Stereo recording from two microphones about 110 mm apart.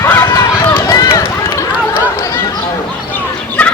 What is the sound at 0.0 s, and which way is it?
Run, 20° left (ahead or behind).